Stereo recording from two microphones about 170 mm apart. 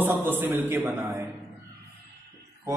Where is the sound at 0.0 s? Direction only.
15° right (ahead or behind).